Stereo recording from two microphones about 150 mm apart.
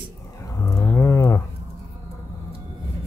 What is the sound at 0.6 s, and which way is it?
Livestock, 20° left (ahead or behind).